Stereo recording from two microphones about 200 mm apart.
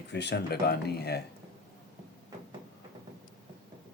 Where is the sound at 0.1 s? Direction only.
55° left (ahead or behind).